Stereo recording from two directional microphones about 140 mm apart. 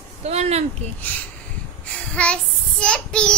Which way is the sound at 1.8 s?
10° left (ahead or behind).